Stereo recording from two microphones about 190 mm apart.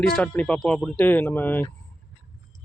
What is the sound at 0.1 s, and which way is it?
Speech, 5° left (ahead or behind).